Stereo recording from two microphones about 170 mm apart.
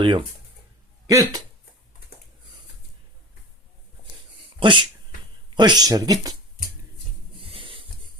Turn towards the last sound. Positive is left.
turn(degrees=-30)  # may be behind; listen again after turning